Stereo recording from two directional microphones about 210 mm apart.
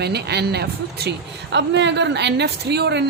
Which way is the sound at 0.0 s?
50° right (ahead or behind).